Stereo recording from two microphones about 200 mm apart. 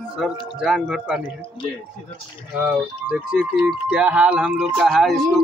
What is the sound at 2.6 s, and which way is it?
Speech, 5° right (ahead or behind).